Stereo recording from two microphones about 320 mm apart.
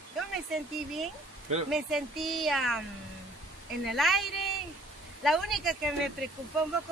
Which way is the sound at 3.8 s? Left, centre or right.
Centre.